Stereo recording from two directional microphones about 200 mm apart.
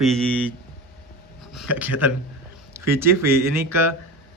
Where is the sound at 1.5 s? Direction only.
10° right (ahead or behind).